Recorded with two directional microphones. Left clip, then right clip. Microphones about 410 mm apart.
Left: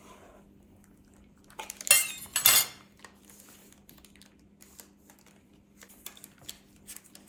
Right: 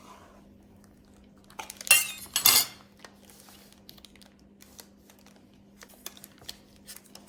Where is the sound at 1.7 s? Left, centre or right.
Centre.